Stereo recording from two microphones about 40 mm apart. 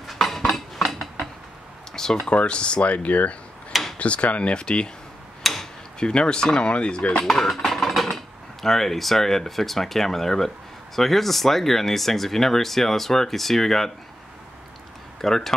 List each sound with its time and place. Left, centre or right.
0.0 s dishes: centre
2.2 s speech: left
5.4 s tick-tock: centre
5.9 s speech: left
7.3 s a sound: centre
8.6 s speech: centre
15.2 s speech: centre